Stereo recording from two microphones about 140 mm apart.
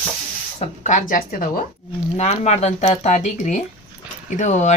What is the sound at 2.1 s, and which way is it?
Speech, 55° left (ahead or behind).